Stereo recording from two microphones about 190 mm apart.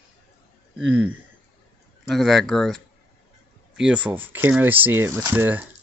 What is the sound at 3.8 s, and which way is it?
Speech, 5° right (ahead or behind).